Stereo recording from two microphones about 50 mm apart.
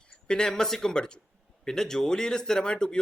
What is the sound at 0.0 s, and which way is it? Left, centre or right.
Speech, centre.